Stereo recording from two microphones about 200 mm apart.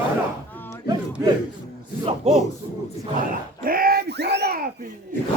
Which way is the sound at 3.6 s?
45° right (ahead or behind).